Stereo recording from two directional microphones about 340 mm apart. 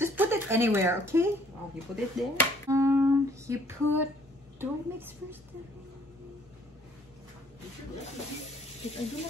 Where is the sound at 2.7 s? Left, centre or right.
Centre.